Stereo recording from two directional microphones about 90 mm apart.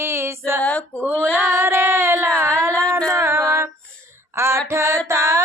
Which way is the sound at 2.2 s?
10° left (ahead or behind).